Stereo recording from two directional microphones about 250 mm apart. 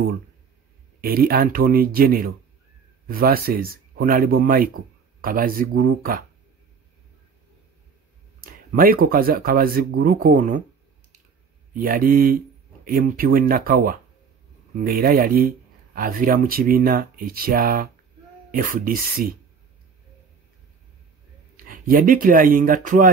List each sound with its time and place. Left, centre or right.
1.0 s speech: right
8.4 s speech: right
11.7 s speech: right
21.5 s speech: right